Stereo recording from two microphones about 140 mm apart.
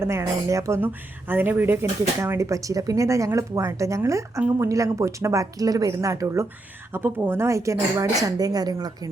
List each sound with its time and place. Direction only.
0.0 s speech: 20° right (ahead or behind)